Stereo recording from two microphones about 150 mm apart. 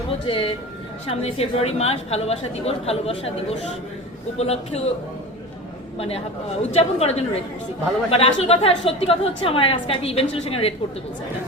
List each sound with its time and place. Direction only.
0.3 s a woman's voice: 35° left (ahead or behind)
4.4 s a woman's voice: 45° left (ahead or behind)
6.0 s a woman's voice: 40° left (ahead or behind)